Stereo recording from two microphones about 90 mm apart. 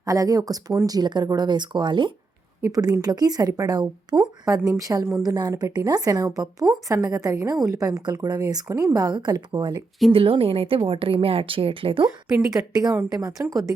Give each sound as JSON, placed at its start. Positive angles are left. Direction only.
{"t": 0.0, "sound": "speech", "side_deg": -40}
{"t": 2.6, "sound": "a woman's voice", "side_deg": -40}
{"t": 8.6, "sound": "speech", "side_deg": -30}
{"t": 8.9, "sound": "a woman's voice", "side_deg": -45}
{"t": 10.1, "sound": "a woman's voice", "side_deg": -90}
{"t": 12.7, "sound": "a woman's voice", "side_deg": -45}